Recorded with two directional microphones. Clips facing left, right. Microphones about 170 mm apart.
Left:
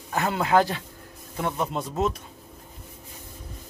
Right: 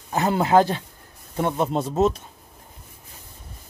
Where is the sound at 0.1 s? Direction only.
25° right (ahead or behind).